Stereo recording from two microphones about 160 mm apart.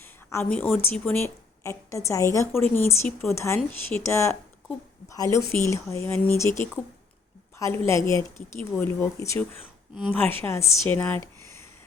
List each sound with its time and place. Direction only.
0.0 s a woman's voice: 15° left (ahead or behind)
7.6 s a woman's voice: 15° left (ahead or behind)